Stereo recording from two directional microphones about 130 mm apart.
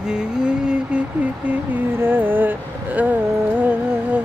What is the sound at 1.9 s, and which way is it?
Music, 15° right (ahead or behind).